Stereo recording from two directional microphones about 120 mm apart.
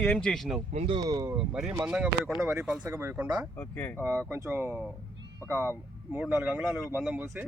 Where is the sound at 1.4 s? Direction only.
5° right (ahead or behind).